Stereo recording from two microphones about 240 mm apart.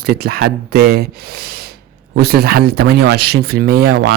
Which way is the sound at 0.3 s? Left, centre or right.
Right.